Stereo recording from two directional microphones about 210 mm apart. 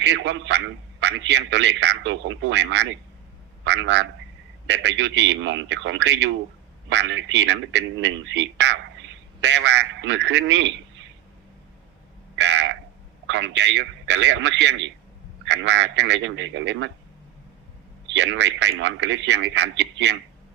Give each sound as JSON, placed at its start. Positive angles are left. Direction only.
{"t": 0.0, "sound": "a man's voice", "side_deg": -60}
{"t": 12.4, "sound": "a sound", "side_deg": -60}
{"t": 13.2, "sound": "a man's voice", "side_deg": -60}
{"t": 18.0, "sound": "a man's voice", "side_deg": -60}